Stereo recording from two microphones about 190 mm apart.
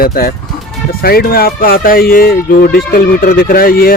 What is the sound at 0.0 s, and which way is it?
Speech, 50° left (ahead or behind).